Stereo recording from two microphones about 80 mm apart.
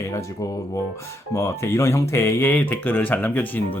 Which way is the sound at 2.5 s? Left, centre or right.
Left.